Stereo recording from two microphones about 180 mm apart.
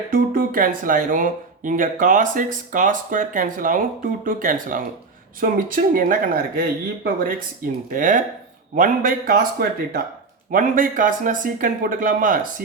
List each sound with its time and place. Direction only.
0.1 s speech: 50° right (ahead or behind)